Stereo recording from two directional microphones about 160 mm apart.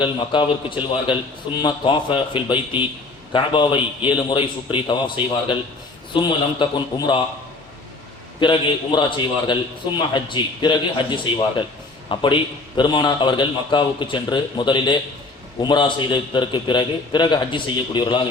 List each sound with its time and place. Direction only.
0.0 s a man's voice: 30° left (ahead or behind)
8.4 s a man's voice: 30° left (ahead or behind)